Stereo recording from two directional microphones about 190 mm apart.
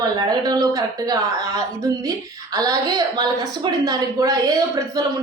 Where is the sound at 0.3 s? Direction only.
20° right (ahead or behind).